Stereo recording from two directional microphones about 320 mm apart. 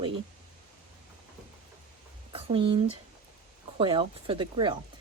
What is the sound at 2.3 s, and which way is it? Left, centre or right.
Speech, centre.